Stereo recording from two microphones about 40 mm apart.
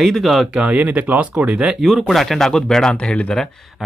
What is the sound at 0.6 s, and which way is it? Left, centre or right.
Speech, right.